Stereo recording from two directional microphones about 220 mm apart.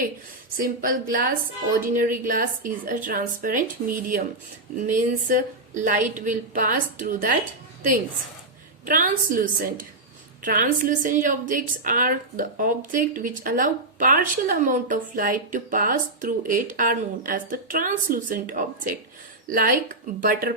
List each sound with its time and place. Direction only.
0.5 s a woman's voice: 40° right (ahead or behind)
8.9 s a woman's voice: 40° right (ahead or behind)